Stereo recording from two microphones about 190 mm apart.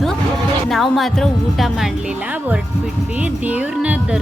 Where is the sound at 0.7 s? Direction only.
Centre (ahead or behind).